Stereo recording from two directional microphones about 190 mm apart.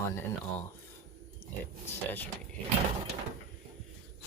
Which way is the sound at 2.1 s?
10° left (ahead or behind).